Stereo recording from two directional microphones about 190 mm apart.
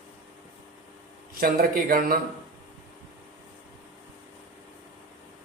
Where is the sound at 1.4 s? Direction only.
50° right (ahead or behind).